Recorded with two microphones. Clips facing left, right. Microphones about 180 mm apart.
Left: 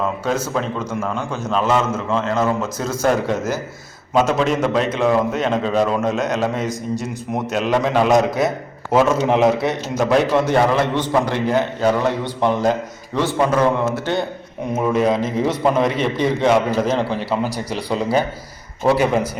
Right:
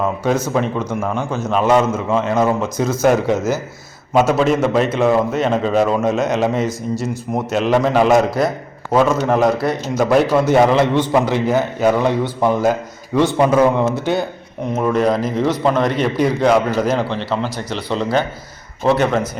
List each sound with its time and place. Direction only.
0.5 s a man's voice: 5° right (ahead or behind)
14.7 s a man's voice: 5° left (ahead or behind)
17.7 s speech: 35° left (ahead or behind)
17.9 s a man's voice: 5° left (ahead or behind)